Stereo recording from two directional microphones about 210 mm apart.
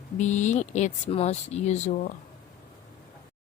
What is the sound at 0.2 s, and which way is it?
Speech, 35° left (ahead or behind).